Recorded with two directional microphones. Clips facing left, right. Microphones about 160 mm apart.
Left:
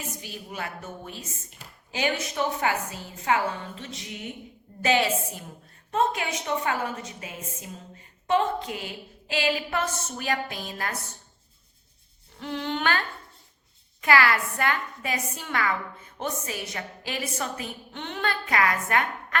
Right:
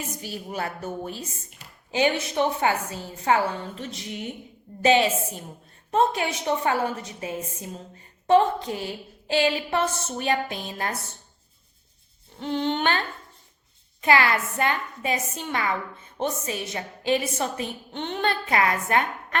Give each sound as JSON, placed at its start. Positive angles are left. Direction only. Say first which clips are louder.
{"t": 0.2, "sound": "a woman's voice", "louder": "right 5 dB", "side_deg": -35}
{"t": 4.8, "sound": "a woman's voice", "louder": "right 4 dB", "side_deg": -20}
{"t": 12.4, "sound": "a woman's voice", "louder": "right 4 dB", "side_deg": -25}
{"t": 14.0, "sound": "a woman's voice", "louder": "right 1 dB", "side_deg": -25}